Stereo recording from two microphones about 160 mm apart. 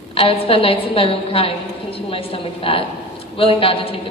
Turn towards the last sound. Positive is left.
turn(degrees=35)  # may be behind; listen again after turning